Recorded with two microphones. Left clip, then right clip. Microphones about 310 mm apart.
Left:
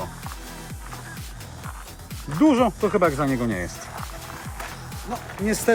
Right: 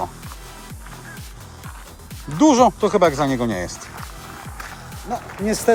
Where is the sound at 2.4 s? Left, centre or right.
Centre.